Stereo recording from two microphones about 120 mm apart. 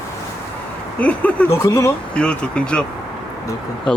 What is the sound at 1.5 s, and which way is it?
Speech, 25° left (ahead or behind).